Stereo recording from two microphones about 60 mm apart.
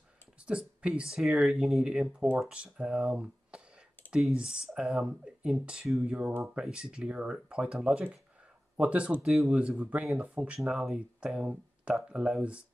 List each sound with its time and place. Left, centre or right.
0.5 s speech: centre
1.2 s speech: centre
1.9 s speech: centre
6.6 s speech: centre
9.2 s speech: centre
9.5 s speech: right